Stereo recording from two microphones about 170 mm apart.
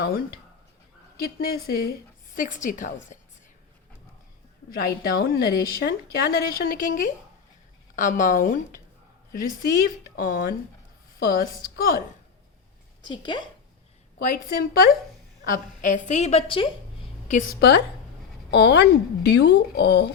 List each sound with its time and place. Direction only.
1.2 s a woman's voice: 60° left (ahead or behind)
4.7 s a woman's voice: 60° left (ahead or behind)
13.0 s speech: 25° left (ahead or behind)
14.2 s a woman's voice: 55° left (ahead or behind); by 16.6 s 35° left (ahead or behind)
17.5 s speech: 70° left (ahead or behind)